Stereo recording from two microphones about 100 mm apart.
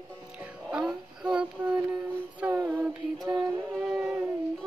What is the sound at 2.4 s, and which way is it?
Female singing, 15° right (ahead or behind).